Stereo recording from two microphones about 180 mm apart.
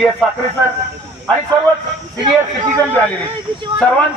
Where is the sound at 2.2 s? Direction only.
25° right (ahead or behind).